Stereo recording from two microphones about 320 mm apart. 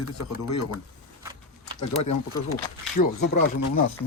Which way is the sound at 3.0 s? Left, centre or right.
Left.